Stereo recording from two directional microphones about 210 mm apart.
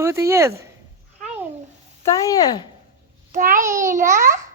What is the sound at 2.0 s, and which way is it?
Speech, 15° left (ahead or behind).